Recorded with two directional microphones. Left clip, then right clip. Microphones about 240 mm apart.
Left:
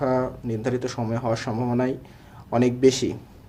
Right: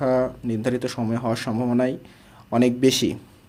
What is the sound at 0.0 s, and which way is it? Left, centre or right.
Speech, right.